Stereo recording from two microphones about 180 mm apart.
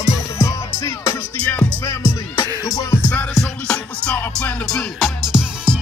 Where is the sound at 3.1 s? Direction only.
5° left (ahead or behind).